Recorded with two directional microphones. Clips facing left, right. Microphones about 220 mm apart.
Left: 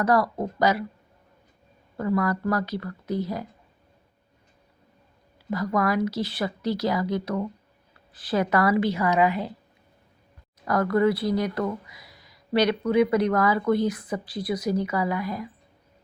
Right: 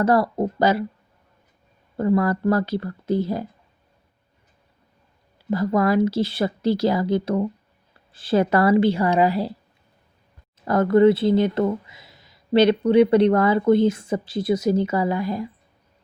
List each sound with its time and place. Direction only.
0.0 s speech: 30° right (ahead or behind)
2.0 s speech: 30° right (ahead or behind)
5.5 s speech: 25° right (ahead or behind)
10.7 s speech: 25° right (ahead or behind)